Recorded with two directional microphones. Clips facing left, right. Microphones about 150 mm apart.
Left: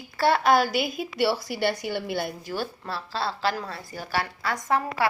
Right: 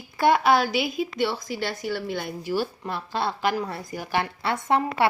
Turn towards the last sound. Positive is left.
turn(degrees=-25)  # may be behind; listen again after turning